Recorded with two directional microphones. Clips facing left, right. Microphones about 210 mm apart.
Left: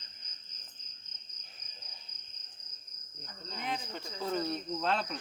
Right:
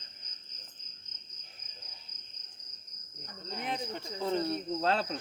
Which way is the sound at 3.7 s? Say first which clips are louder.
Right 2 dB; 25° right (ahead or behind).